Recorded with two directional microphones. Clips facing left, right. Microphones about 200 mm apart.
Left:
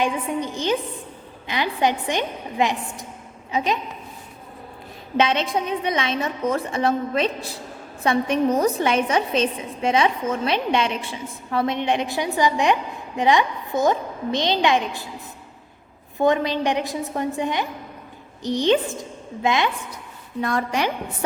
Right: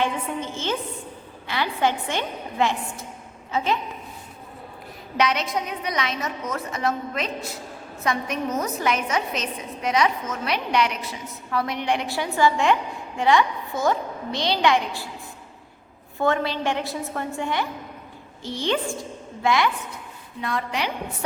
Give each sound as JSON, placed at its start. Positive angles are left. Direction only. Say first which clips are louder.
{"t": 0.0, "sound": "a woman's voice", "louder": "left 3 dB", "side_deg": 15}
{"t": 5.1, "sound": "a woman's voice", "louder": "left 3 dB", "side_deg": 25}
{"t": 16.1, "sound": "a woman's voice", "louder": "left 3 dB", "side_deg": 15}
{"t": 20.4, "sound": "a woman's voice", "louder": "left 4 dB", "side_deg": 45}